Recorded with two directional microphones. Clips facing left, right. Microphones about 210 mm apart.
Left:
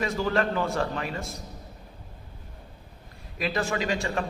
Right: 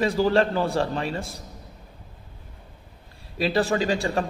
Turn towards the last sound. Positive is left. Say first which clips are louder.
# right 4 dB
turn(degrees=-35)  # may be behind; listen again after turning